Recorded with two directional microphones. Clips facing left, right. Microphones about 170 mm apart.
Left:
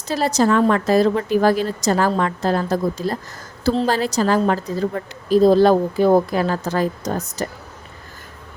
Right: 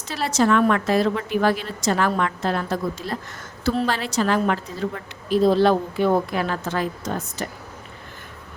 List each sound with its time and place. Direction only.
0.1 s a woman's voice: 40° left (ahead or behind)